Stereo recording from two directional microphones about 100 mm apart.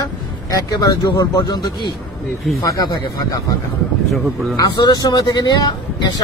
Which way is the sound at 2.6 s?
35° left (ahead or behind).